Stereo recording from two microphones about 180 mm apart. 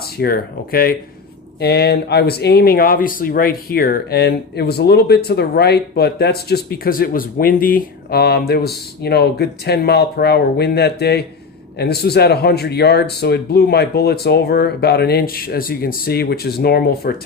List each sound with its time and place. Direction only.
0.2 s speech: 55° left (ahead or behind)